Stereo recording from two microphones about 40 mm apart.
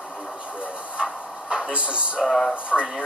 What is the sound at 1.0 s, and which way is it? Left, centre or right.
Train, centre.